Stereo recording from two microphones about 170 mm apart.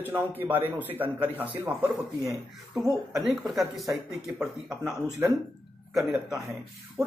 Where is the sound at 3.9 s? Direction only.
15° right (ahead or behind).